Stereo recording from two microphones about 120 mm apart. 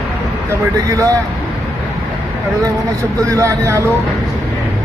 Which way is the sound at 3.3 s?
25° right (ahead or behind).